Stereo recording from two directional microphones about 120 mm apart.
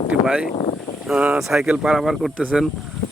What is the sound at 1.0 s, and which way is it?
Speech, 10° right (ahead or behind).